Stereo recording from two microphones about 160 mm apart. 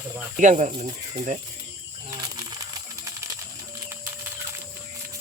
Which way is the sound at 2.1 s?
25° right (ahead or behind).